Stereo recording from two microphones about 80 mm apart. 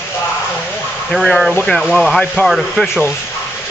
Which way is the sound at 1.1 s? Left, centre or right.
Centre.